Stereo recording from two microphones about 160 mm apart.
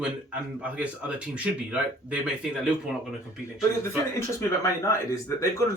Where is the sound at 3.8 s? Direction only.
15° left (ahead or behind).